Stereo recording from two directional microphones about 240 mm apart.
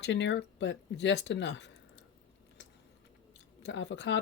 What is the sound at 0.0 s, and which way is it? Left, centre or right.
Speech, left.